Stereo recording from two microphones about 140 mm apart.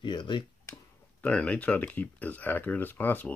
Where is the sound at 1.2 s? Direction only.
10° left (ahead or behind).